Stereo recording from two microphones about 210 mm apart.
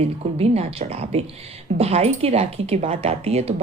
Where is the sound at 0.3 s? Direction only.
30° right (ahead or behind).